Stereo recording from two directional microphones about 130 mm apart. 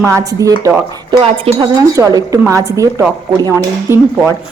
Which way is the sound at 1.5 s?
50° right (ahead or behind).